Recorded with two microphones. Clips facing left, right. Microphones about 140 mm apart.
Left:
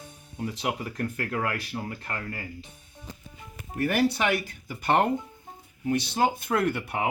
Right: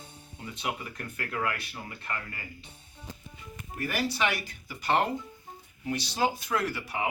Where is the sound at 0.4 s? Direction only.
70° left (ahead or behind).